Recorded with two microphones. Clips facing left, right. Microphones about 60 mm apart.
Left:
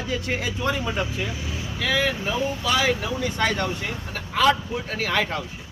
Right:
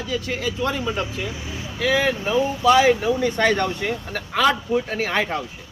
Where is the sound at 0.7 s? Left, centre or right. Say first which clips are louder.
Right 1 dB; centre.